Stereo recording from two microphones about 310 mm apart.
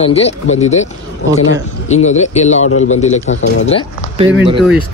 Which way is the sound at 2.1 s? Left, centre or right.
Left.